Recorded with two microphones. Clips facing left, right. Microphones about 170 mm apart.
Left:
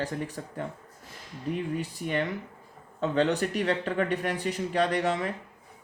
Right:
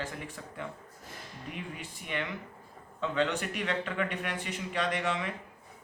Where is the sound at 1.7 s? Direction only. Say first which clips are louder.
Left 8 dB; 40° left (ahead or behind).